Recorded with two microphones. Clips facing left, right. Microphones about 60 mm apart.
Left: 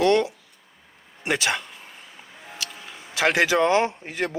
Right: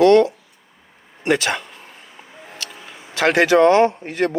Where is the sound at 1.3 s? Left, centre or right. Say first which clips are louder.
Right 5 dB; centre.